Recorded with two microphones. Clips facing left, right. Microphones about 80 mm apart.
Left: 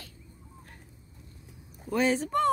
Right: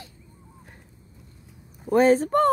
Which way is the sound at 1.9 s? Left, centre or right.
Right.